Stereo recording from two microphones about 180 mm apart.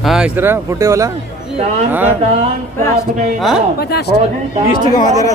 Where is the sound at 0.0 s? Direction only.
5° right (ahead or behind).